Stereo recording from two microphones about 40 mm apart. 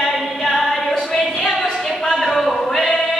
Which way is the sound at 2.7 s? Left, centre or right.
Centre.